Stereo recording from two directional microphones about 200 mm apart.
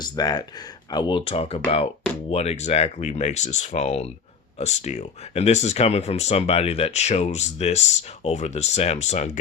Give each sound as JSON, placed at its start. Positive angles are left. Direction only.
{"t": 0.0, "sound": "speech", "side_deg": 20}